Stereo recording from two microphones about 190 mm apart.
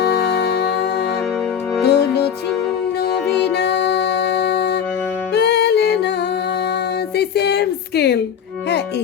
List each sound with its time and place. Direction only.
0.0 s music: 60° left (ahead or behind)
1.8 s music: 60° left (ahead or behind)
3.5 s music: 60° left (ahead or behind)
7.2 s a sound: 60° left (ahead or behind)